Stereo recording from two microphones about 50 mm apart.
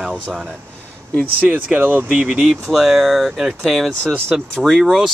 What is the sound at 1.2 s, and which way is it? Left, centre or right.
Speech, right.